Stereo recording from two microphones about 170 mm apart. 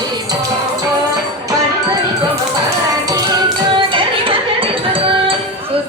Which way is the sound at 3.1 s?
25° right (ahead or behind).